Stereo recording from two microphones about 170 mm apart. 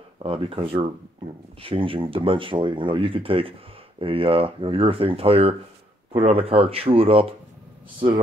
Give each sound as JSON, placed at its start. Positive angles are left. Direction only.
{"t": 0.2, "sound": "speech", "side_deg": -35}